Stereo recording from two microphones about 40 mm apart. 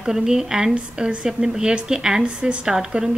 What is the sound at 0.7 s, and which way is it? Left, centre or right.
Speech, right.